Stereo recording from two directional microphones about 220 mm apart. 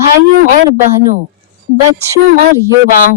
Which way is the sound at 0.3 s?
45° right (ahead or behind).